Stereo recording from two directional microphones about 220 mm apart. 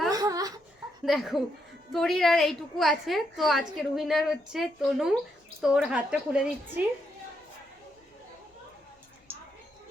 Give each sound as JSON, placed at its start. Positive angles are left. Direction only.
{"t": 0.1, "sound": "baby cry", "side_deg": -15}
{"t": 1.0, "sound": "a woman's voice", "side_deg": 0}